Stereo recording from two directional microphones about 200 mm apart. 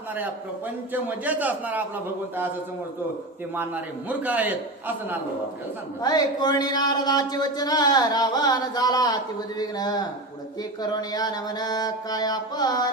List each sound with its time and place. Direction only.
1.0 s a man's voice: 10° right (ahead or behind)
3.5 s a man's voice: 10° right (ahead or behind)
6.0 s speech: 20° left (ahead or behind)